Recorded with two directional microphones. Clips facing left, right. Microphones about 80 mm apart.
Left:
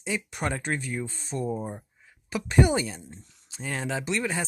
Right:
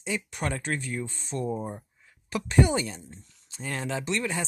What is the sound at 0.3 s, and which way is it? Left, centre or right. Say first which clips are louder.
Speech: left 1 dB; left.